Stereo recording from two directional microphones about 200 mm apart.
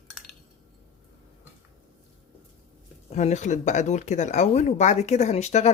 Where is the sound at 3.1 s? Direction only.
35° left (ahead or behind).